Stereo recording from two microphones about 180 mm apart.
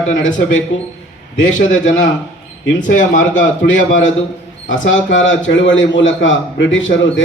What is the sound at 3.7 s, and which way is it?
A man's voice, 90° left.